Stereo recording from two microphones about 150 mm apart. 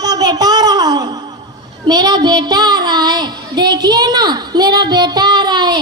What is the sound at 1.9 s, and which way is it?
Child singing, 25° right (ahead or behind).